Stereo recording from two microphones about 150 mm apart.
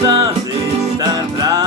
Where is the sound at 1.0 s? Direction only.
25° right (ahead or behind).